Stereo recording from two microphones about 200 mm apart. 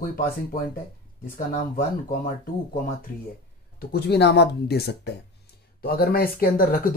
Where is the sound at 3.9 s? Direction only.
55° left (ahead or behind).